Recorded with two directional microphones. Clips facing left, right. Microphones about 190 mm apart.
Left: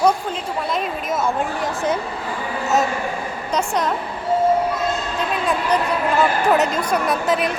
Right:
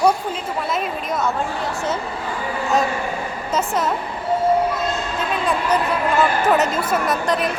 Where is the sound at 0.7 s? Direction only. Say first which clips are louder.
Left 1 dB; centre (ahead or behind).